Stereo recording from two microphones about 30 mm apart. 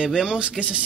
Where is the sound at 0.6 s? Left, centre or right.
Right.